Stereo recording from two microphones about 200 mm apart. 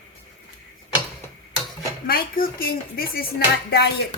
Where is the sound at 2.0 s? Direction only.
45° left (ahead or behind).